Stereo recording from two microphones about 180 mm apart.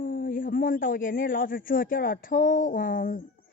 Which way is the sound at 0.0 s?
50° left (ahead or behind).